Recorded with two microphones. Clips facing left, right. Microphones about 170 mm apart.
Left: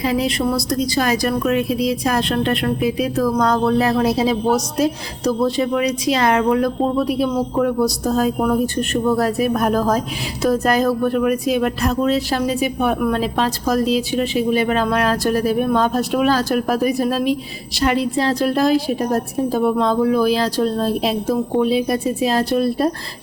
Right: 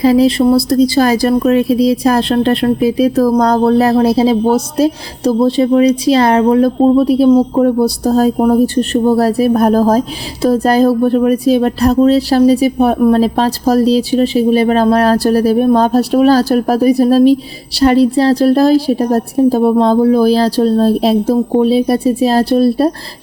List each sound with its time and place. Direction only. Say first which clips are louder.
0.0 s speech: right 10 dB; 35° right (ahead or behind)